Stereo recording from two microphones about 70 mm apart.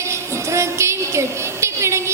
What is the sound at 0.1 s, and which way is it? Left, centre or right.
Music, right.